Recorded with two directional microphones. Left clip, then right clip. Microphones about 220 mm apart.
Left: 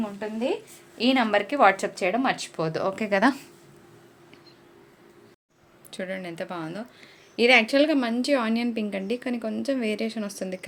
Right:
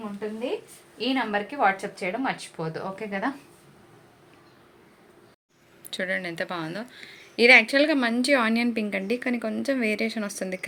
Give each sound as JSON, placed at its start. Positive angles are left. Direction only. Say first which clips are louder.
{"t": 0.2, "sound": "speech", "louder": "left 1 dB", "side_deg": 50}
{"t": 5.9, "sound": "speech", "louder": "right 5 dB", "side_deg": 0}